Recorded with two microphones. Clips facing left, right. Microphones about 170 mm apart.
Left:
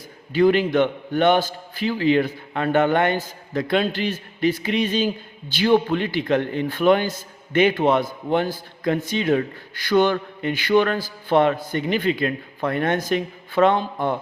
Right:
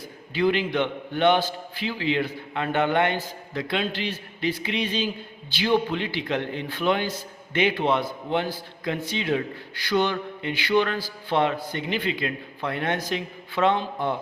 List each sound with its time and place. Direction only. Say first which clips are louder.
0.3 s a man's voice: left 6 dB; 45° left (ahead or behind)